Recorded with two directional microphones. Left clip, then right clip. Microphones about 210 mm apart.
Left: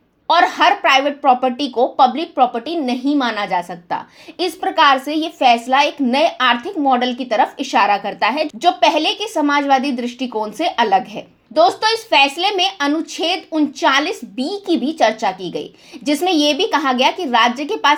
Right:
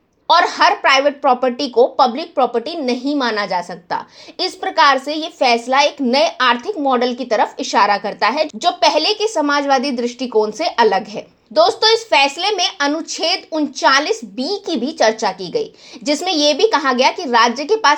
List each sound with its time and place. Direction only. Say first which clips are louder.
0.3 s a woman's voice: even; 15° right (ahead or behind)